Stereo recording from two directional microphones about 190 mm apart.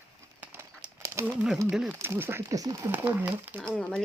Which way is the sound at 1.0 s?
15° right (ahead or behind).